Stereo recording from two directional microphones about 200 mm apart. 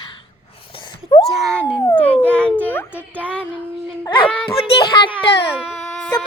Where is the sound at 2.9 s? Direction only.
10° right (ahead or behind).